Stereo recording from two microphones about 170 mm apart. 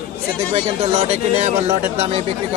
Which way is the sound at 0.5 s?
35° right (ahead or behind).